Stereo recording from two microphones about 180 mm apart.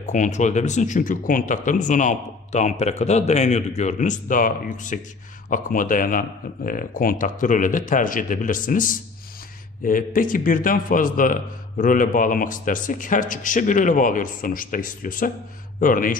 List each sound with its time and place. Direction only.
0.0 s speech: 45° left (ahead or behind)